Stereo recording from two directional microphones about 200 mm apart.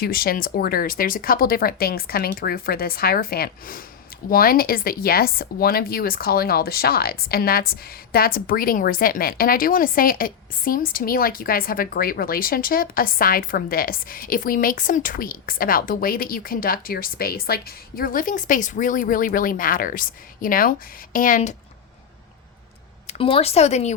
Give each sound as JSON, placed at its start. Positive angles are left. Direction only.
{"t": 0.0, "sound": "speech", "side_deg": 45}
{"t": 23.0, "sound": "speech", "side_deg": 25}